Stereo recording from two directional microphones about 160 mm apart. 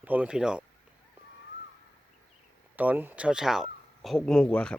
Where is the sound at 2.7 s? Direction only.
10° right (ahead or behind); by 4.8 s 5° left (ahead or behind).